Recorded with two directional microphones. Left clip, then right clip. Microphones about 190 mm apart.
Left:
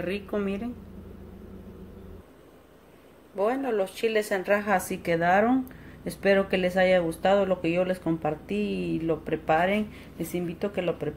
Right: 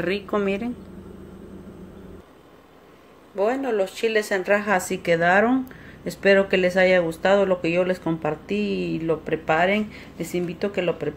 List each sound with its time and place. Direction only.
0.0 s a woman's voice: 20° right (ahead or behind)
3.3 s speech: 5° right (ahead or behind)